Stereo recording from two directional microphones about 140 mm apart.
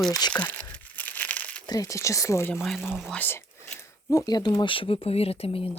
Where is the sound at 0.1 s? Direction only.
30° left (ahead or behind).